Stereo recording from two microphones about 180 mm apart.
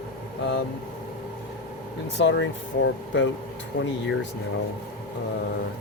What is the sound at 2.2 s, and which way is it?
Speech, 85° left.